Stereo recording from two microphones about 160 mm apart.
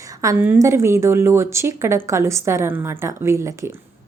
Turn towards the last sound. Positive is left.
turn(degrees=-20)  # may be behind; listen again after turning